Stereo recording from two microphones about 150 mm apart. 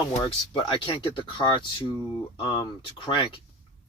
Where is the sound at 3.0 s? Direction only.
35° left (ahead or behind).